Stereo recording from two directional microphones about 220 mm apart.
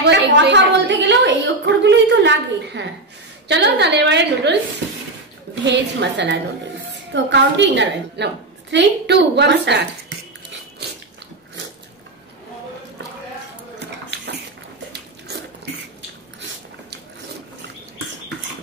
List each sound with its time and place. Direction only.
0.0 s a sound: 50° right (ahead or behind)
3.4 s a woman's voice: 50° right (ahead or behind)
14.9 s biting: 45° right (ahead or behind)